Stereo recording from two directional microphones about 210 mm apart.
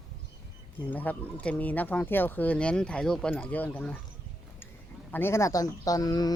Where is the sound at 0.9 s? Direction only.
10° left (ahead or behind).